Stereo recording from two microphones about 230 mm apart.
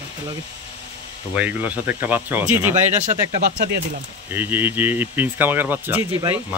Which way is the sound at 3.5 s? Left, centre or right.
Right.